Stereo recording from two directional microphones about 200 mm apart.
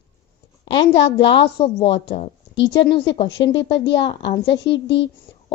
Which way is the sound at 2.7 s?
60° left (ahead or behind).